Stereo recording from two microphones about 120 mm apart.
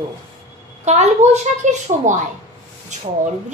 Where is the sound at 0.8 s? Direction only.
65° right (ahead or behind).